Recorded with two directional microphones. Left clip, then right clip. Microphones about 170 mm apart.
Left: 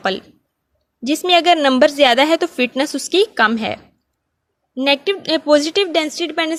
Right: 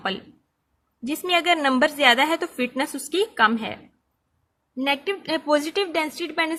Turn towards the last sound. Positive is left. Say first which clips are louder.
# left 5 dB
turn(degrees=30)  # may be behind; listen again after turning